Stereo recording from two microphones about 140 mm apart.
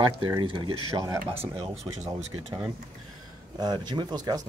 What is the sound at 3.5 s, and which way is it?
Speech, 30° right (ahead or behind).